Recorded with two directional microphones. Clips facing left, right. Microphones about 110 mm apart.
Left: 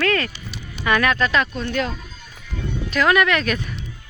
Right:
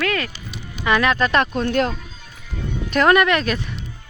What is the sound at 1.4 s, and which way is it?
Speech, 60° right (ahead or behind).